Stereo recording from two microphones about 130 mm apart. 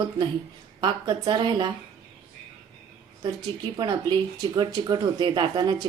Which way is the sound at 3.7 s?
30° right (ahead or behind).